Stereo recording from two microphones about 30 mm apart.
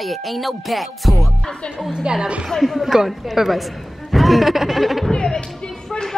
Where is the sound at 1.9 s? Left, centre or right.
Right.